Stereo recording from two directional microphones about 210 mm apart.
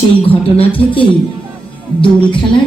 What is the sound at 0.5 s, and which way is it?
Speech, 25° left (ahead or behind).